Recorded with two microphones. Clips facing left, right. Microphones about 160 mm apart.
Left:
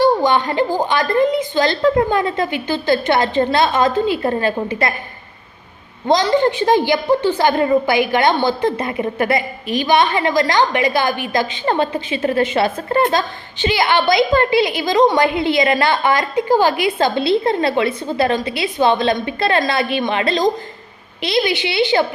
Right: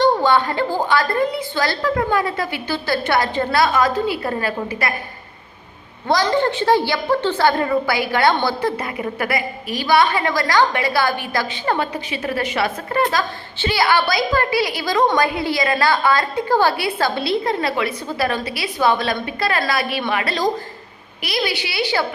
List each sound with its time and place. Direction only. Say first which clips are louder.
0.0 s a woman's voice: left 1 dB; 15° left (ahead or behind)
6.1 s a woman's voice: left 3 dB; 15° left (ahead or behind)